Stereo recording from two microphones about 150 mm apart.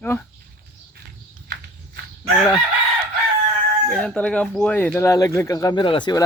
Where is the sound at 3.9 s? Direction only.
5° left (ahead or behind); by 6.3 s 25° left (ahead or behind).